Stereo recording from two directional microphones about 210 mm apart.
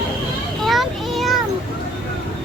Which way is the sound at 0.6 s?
Centre (ahead or behind).